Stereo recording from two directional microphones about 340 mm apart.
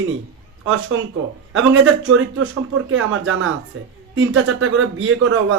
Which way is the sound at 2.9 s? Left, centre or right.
Right.